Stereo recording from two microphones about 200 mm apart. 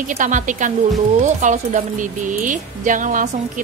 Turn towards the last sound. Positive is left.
turn(degrees=-40)  # may be behind; listen again after turning